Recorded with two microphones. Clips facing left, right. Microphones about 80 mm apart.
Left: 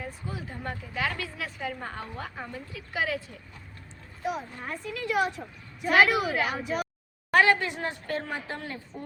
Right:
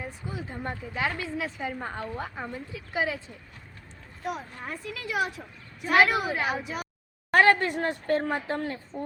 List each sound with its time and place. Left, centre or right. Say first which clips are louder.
0.0 s speech: right 1 dB; right
4.2 s a woman's voice: left 2 dB; centre
7.3 s a woman's voice: right 2 dB; right